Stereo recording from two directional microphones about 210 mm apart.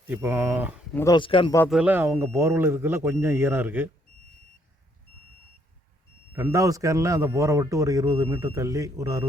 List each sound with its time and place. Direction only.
0.1 s speech: 10° right (ahead or behind)
0.9 s speech: 20° left (ahead or behind)
1.7 s speech: 5° right (ahead or behind)
6.3 s speech: 15° right (ahead or behind)